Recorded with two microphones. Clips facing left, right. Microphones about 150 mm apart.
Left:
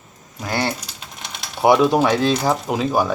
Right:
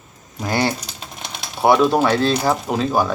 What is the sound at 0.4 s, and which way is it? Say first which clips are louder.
Typing: right 3 dB; 15° right (ahead or behind).